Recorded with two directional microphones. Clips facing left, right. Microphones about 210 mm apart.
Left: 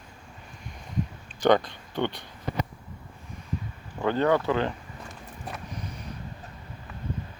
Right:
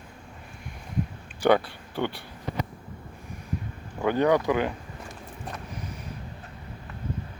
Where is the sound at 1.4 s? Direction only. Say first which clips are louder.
Even; 10° right (ahead or behind).